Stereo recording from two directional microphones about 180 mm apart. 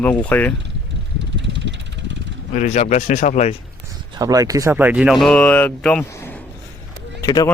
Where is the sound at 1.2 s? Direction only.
85° right.